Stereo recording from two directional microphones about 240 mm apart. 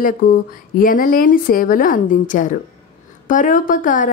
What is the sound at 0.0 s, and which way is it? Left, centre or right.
Speech, left.